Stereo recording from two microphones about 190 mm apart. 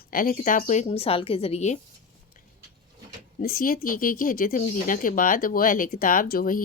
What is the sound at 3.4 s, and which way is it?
Speech, 50° left (ahead or behind).